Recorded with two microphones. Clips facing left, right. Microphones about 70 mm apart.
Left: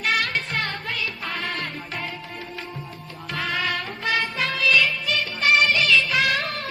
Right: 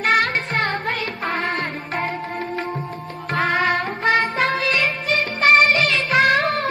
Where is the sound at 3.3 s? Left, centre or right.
Right.